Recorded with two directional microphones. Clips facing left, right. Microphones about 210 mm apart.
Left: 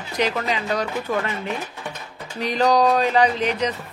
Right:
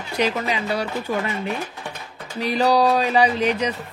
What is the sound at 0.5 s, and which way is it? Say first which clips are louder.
Speech: even; 10° right (ahead or behind).